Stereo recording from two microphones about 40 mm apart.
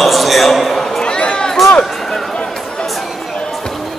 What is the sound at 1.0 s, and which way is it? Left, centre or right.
Run, left.